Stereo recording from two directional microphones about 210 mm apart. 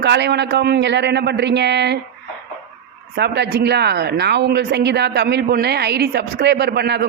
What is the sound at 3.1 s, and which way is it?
Speech, 55° right (ahead or behind).